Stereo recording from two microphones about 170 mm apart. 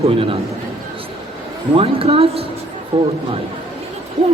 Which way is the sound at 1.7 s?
35° right (ahead or behind).